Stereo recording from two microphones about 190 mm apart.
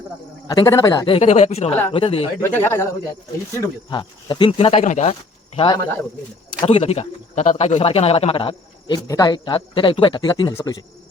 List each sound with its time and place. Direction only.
0.4 s speech: 20° left (ahead or behind)
2.4 s speech: 10° left (ahead or behind)
3.8 s speech: 25° left (ahead or behind)
5.5 s speech: 25° left (ahead or behind)